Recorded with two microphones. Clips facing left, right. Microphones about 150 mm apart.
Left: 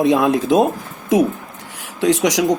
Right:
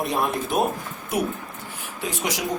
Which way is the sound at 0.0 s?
90° left.